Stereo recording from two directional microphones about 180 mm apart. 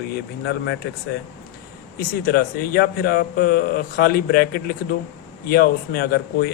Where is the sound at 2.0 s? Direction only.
55° left (ahead or behind).